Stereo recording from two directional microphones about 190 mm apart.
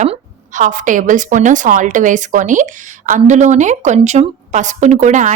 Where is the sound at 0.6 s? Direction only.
45° right (ahead or behind).